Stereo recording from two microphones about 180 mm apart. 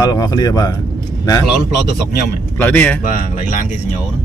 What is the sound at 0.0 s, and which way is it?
Speech, 20° left (ahead or behind).